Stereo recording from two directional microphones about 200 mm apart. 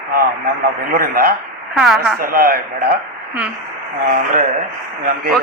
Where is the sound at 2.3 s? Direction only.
45° right (ahead or behind).